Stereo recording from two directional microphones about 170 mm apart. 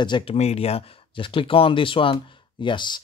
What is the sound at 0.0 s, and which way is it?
Speech, 30° left (ahead or behind).